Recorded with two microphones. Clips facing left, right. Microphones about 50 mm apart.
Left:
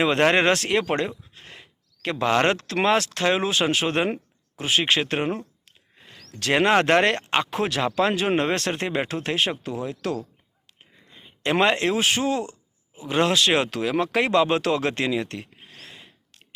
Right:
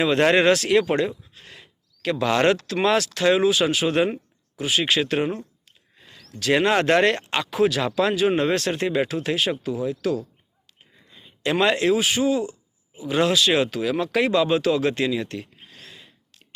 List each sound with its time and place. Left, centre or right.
0.0 s speech: left
1.3 s a sound: left
2.8 s speech: left
6.0 s a sound: left
6.4 s speech: left
11.1 s a man's voice: left